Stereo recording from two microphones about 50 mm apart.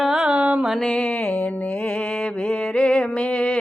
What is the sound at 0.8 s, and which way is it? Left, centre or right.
Mantra, left.